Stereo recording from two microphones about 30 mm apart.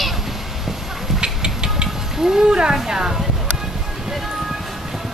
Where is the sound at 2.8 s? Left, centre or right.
Right.